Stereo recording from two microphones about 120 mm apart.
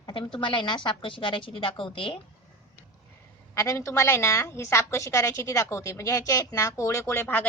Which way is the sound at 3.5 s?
25° left (ahead or behind).